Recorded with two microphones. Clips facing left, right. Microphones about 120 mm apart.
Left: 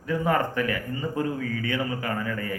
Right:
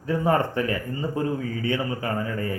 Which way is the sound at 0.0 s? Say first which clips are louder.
Right 2 dB; 30° right (ahead or behind).